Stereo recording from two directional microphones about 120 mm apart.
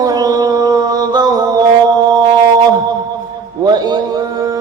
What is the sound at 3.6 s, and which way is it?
Mantra, 35° right (ahead or behind).